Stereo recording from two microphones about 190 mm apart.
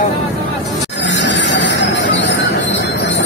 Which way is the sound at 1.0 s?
70° left (ahead or behind).